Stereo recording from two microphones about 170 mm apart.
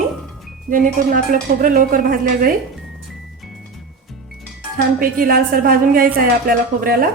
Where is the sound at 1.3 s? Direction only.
55° right (ahead or behind).